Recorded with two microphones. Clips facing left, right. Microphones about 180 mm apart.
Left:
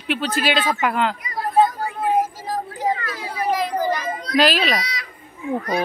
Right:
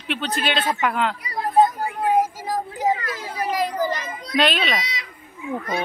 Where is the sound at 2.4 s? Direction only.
15° right (ahead or behind).